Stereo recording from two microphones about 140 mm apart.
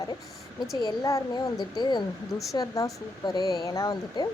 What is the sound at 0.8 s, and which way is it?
Speech, 30° left (ahead or behind).